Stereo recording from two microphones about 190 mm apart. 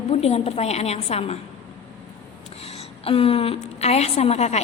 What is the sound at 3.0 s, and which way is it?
A woman's voice, 30° left (ahead or behind).